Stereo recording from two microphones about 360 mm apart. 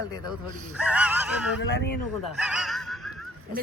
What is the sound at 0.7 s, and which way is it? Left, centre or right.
Speech, centre.